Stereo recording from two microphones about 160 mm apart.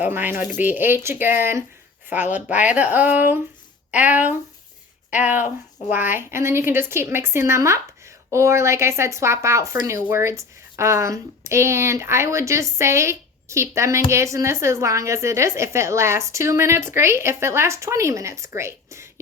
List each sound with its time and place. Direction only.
0.0 s speech: 10° right (ahead or behind)
2.1 s a woman's voice: 50° left (ahead or behind)
2.6 s speech: 10° right (ahead or behind)
6.1 s speech: 15° right (ahead or behind)